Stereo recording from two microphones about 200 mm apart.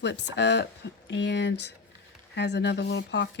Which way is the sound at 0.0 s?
60° left (ahead or behind).